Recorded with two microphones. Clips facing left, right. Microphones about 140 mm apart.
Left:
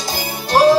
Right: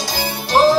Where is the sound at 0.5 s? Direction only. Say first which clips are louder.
Left 1 dB; centre (ahead or behind).